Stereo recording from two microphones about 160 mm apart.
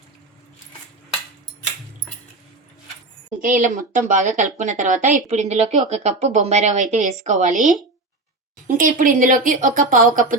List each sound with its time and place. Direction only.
3.4 s speech: 55° right (ahead or behind)